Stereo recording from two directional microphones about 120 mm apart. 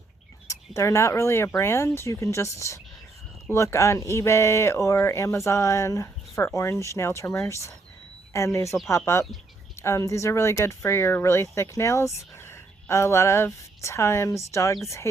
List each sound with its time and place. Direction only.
0.4 s speech: 25° left (ahead or behind)